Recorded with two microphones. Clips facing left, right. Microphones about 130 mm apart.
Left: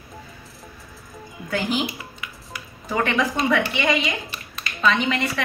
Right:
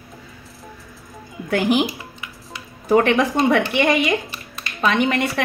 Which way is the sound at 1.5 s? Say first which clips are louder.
Right 6 dB; 60° right (ahead or behind).